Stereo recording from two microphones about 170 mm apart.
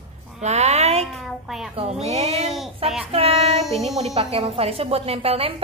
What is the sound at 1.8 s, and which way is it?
A woman's voice, 40° right (ahead or behind).